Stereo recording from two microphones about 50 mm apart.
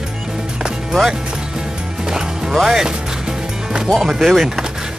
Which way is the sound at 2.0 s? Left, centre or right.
Centre.